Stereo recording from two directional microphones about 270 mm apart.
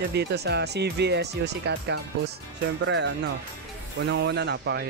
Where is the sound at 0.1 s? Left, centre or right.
Right.